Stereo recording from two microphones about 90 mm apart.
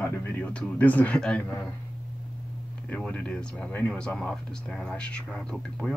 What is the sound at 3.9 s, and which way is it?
Speech, 10° left (ahead or behind).